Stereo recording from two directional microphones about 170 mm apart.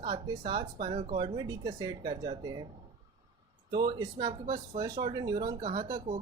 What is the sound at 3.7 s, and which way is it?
Speech, 25° right (ahead or behind).